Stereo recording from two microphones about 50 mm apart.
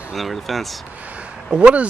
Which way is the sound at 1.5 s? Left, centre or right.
Right.